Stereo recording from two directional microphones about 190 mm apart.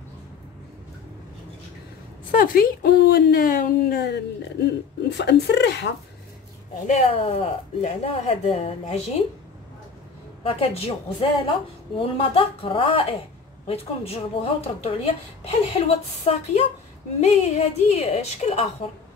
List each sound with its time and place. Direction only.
2.3 s speech: 50° left (ahead or behind)
6.9 s speech: 30° left (ahead or behind)
10.4 s speech: 30° left (ahead or behind)